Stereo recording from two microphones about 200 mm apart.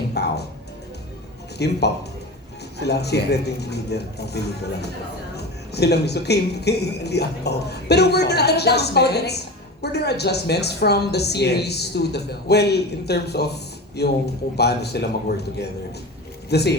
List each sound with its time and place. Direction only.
0.1 s music: 55° left (ahead or behind)
1.5 s a woman's voice: 55° left (ahead or behind)